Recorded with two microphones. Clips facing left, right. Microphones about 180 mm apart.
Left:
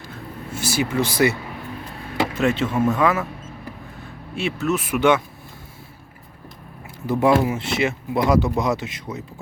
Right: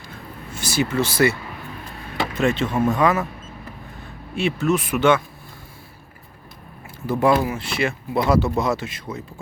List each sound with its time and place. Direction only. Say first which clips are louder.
0.5 s speech: even; 10° left (ahead or behind)
4.4 s speech: right 2 dB; centre (ahead or behind)
7.1 s speech: left 1 dB; 20° left (ahead or behind)